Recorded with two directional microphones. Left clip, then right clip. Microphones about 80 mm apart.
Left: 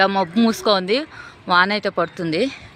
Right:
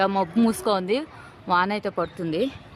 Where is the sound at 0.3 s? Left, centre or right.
Left.